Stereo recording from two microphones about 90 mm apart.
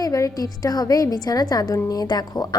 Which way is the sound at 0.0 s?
40° left (ahead or behind).